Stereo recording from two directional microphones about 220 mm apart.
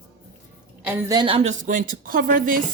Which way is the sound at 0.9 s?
15° right (ahead or behind).